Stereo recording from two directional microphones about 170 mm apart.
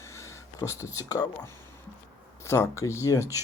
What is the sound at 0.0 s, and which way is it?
Speech, 15° left (ahead or behind).